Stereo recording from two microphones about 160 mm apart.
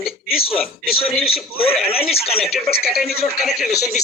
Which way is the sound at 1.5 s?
35° left (ahead or behind).